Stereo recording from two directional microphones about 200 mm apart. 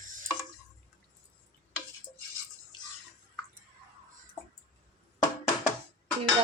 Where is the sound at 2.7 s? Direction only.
20° left (ahead or behind).